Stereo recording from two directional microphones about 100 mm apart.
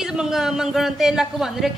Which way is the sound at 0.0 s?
5° right (ahead or behind).